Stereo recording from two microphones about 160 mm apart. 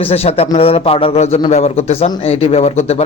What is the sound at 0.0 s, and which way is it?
A man's voice, 40° left (ahead or behind).